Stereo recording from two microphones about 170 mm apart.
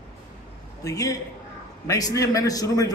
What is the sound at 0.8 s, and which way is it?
A man's voice, 20° left (ahead or behind).